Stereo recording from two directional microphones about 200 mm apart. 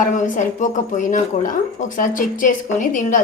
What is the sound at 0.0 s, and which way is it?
A woman's voice, 40° left (ahead or behind).